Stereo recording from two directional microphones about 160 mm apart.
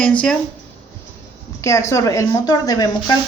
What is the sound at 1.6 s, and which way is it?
Speech, 20° left (ahead or behind).